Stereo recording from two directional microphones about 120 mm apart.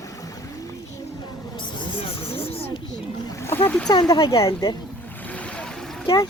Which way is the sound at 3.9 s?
35° left (ahead or behind).